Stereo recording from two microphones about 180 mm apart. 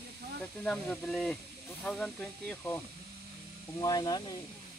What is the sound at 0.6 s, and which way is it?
Speech, 5° left (ahead or behind).